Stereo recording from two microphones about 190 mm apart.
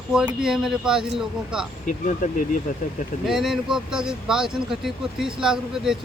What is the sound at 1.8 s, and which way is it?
Speech, 45° left (ahead or behind).